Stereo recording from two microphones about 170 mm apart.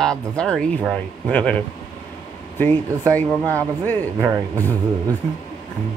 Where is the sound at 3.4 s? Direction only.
20° right (ahead or behind).